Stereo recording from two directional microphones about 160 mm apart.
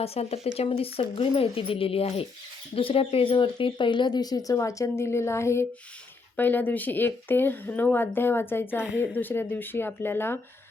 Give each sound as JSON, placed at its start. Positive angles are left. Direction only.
{"t": 0.0, "sound": "speech", "side_deg": 40}